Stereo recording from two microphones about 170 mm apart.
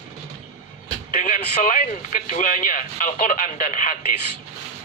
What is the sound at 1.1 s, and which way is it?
Speech, 45° left (ahead or behind).